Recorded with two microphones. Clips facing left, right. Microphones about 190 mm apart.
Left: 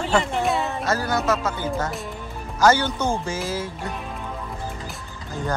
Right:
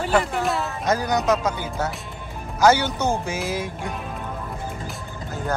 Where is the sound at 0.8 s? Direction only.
15° right (ahead or behind).